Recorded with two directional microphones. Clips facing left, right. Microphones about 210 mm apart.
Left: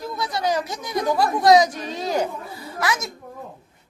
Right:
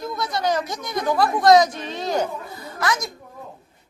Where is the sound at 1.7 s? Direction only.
40° left (ahead or behind).